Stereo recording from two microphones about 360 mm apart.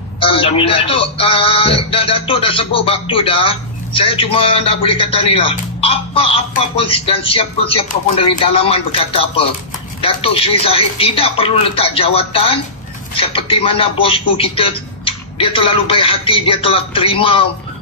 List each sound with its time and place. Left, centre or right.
0.2 s speech: centre